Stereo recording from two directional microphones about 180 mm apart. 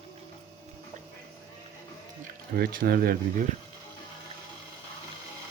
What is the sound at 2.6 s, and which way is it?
Speech, 55° right (ahead or behind).